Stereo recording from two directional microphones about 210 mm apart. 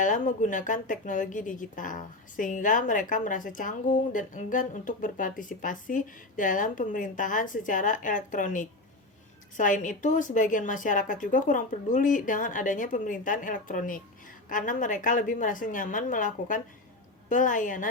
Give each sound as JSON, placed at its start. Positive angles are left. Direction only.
{"t": 0.0, "sound": "speech", "side_deg": 35}